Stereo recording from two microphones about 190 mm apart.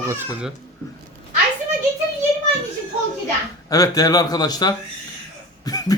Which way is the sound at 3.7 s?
20° left (ahead or behind).